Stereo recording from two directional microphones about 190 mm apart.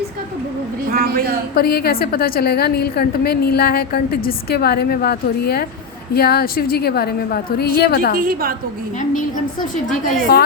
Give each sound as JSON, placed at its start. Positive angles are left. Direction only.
{"t": 0.9, "sound": "a man's voice", "side_deg": -50}
{"t": 1.5, "sound": "a woman's voice", "side_deg": 55}
{"t": 8.1, "sound": "a man's voice", "side_deg": -50}
{"t": 9.0, "sound": "a woman's voice", "side_deg": 45}
{"t": 10.3, "sound": "a woman's voice", "side_deg": 55}